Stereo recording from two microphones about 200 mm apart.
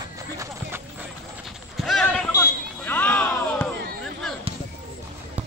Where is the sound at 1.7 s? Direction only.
Centre (ahead or behind).